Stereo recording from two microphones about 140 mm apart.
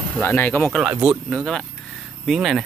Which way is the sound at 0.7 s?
5° right (ahead or behind).